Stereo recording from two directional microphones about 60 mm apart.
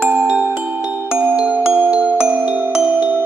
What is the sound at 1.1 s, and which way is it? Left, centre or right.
Music, right.